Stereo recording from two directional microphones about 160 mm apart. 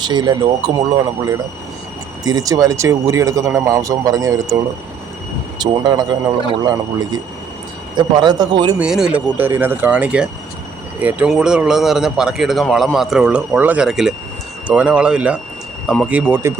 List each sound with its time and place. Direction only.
0.0 s speech: 25° right (ahead or behind)
2.2 s speech: 25° right (ahead or behind)
8.8 s speech: 5° right (ahead or behind)